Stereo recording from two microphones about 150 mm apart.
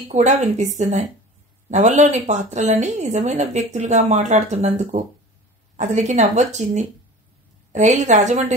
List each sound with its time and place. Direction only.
0.1 s a woman's voice: 50° right (ahead or behind)